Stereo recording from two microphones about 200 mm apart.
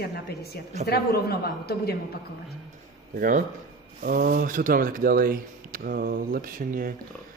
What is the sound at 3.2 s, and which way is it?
A man's voice, 40° right (ahead or behind).